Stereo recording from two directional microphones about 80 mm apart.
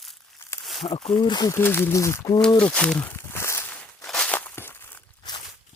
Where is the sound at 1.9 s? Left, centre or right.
Left.